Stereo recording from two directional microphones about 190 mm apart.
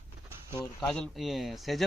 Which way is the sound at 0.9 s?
5° left (ahead or behind).